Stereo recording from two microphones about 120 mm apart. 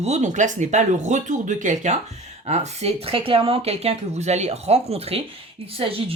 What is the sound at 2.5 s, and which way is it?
A woman's voice, 65° right (ahead or behind).